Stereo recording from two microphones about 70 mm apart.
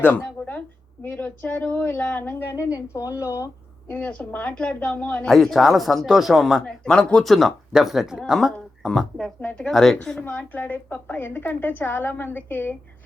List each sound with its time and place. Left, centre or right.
0.0 s a sound: left
1.6 s a woman's voice: left
2.7 s speech: left
3.8 s a woman's voice: left
5.3 s speech: centre
6.7 s a woman's voice: centre
8.9 s a woman's voice: centre
9.4 s a woman's voice: centre
9.6 s a woman's voice: centre
10.2 s a woman's voice: left